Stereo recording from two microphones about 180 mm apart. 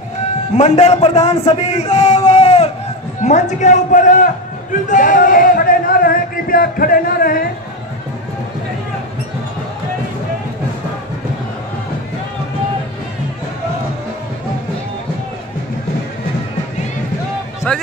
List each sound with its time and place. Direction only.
0.6 s a man's voice: 40° left (ahead or behind)
2.1 s a sound: 30° left (ahead or behind)
3.2 s a man's voice: 40° left (ahead or behind)
17.7 s speech: 5° left (ahead or behind)